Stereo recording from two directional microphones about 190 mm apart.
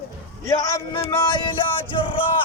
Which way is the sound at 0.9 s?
20° left (ahead or behind).